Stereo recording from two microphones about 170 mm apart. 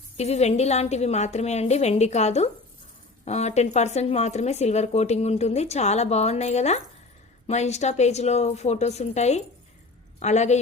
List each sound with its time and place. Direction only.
0.2 s a woman's voice: 40° left (ahead or behind)